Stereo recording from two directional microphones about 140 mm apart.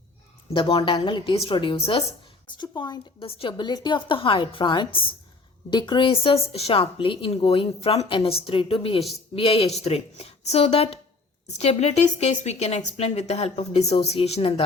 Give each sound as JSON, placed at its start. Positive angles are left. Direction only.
{"t": 0.5, "sound": "a woman's voice", "side_deg": 40}